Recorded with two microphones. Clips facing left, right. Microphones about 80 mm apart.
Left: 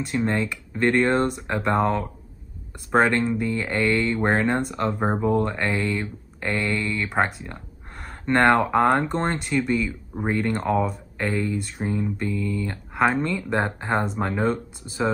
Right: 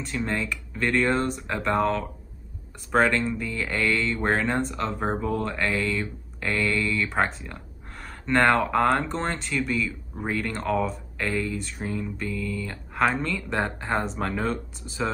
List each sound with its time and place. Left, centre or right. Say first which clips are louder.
0.0 s speech: left 4 dB; centre
8.0 s a sound: left 3 dB; centre
8.5 s speech: left 4 dB; centre